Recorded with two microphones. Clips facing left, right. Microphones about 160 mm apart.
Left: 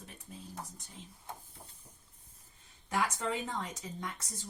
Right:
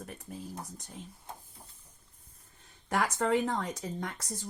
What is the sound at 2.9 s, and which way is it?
Speech, 60° right (ahead or behind).